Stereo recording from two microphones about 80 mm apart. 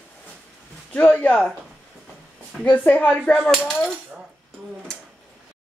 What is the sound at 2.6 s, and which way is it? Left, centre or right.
Speech, centre.